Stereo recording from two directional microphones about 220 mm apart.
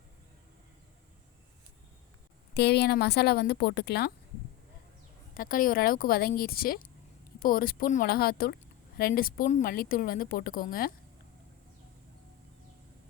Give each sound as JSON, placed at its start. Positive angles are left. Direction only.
{"t": 2.6, "sound": "a woman's voice", "side_deg": 50}
{"t": 5.3, "sound": "speech", "side_deg": 40}